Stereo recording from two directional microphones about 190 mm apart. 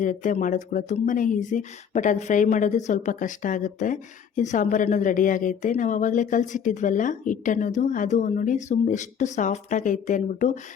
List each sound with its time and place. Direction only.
0.0 s speech: 40° left (ahead or behind)